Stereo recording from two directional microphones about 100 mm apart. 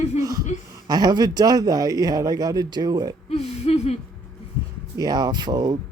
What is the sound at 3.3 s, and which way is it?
Speech, 90° left.